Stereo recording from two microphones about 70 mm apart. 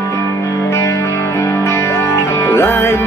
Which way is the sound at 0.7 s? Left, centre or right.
Left.